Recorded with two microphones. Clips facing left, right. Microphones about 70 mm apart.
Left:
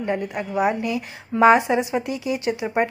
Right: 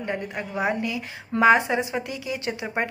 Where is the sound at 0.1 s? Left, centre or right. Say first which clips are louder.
Left 5 dB; centre.